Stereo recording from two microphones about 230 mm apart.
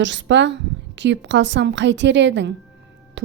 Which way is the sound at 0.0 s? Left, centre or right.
Right.